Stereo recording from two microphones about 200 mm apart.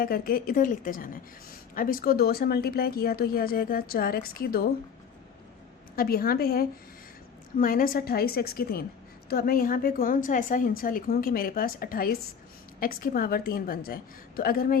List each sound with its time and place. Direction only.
0.0 s a woman's voice: 45° left (ahead or behind)
6.0 s a woman's voice: 50° left (ahead or behind)